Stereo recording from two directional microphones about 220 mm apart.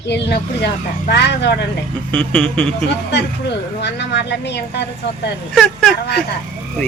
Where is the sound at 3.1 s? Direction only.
50° left (ahead or behind).